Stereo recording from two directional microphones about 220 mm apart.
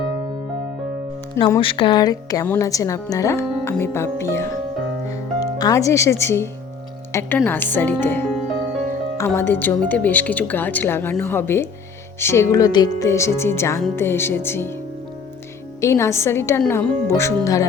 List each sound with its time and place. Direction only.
1.4 s a woman's voice: 20° left (ahead or behind)
5.0 s music: 15° left (ahead or behind)
7.1 s a woman's voice: 10° left (ahead or behind)
9.1 s a woman's voice: 10° left (ahead or behind)
15.8 s a woman's voice: 15° left (ahead or behind)